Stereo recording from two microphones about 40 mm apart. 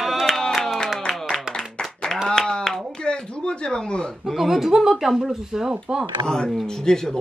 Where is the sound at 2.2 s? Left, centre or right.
Centre.